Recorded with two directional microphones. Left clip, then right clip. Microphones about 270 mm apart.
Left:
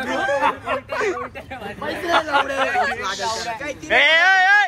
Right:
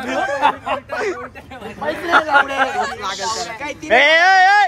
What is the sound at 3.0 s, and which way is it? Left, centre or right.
Speech, right.